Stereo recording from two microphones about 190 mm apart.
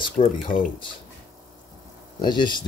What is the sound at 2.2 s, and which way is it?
Speech, 25° left (ahead or behind).